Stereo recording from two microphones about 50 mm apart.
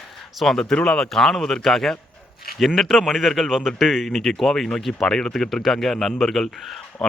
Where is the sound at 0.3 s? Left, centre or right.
Centre.